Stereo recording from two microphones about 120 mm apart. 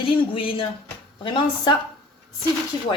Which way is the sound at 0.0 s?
50° left (ahead or behind).